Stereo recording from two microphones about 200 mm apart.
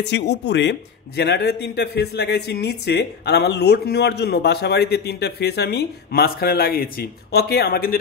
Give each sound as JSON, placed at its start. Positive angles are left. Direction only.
{"t": 0.0, "sound": "a man's voice", "side_deg": 60}